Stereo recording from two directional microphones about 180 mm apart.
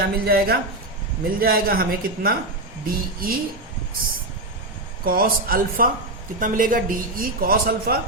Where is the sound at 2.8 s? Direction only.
55° right (ahead or behind).